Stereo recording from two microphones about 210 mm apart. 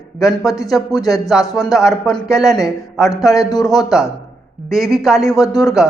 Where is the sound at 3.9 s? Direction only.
Centre (ahead or behind).